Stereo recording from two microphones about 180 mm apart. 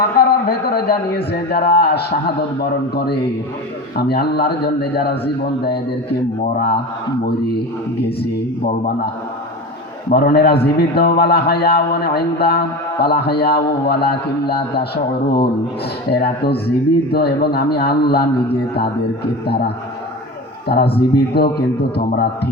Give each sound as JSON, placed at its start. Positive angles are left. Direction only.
{"t": 0.0, "sound": "a man's voice", "side_deg": 60}
{"t": 8.0, "sound": "a man's voice", "side_deg": 65}
{"t": 10.1, "sound": "a man's voice", "side_deg": 60}
{"t": 16.0, "sound": "a man's voice", "side_deg": 60}
{"t": 19.5, "sound": "a man's voice", "side_deg": 65}